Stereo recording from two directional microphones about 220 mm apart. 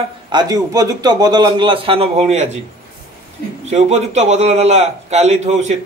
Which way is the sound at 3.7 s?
30° right (ahead or behind).